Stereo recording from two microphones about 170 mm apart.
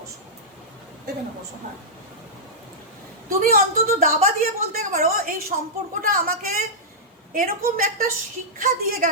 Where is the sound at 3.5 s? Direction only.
55° right (ahead or behind).